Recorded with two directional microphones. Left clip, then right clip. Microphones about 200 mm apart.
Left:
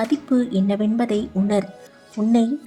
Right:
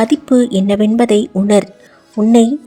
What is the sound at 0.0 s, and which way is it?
A woman's voice, 35° right (ahead or behind).